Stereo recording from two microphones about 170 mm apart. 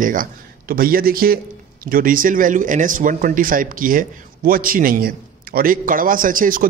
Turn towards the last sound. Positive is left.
turn(degrees=-55)  # may be behind; listen again after turning